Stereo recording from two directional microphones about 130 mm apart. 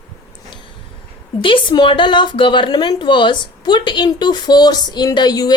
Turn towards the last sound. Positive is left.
turn(degrees=30)  # may be behind; listen again after turning